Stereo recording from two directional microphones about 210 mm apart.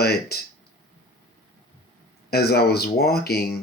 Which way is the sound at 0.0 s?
50° left (ahead or behind).